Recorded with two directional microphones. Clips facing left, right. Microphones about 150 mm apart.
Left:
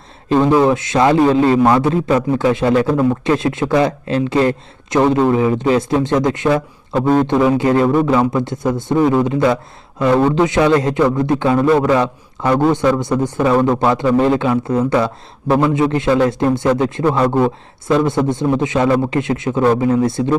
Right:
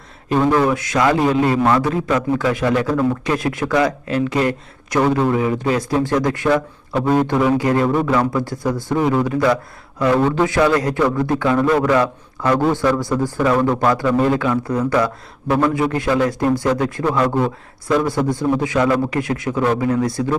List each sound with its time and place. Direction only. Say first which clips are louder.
0.6 s a man's voice: left 3 dB; 25° left (ahead or behind)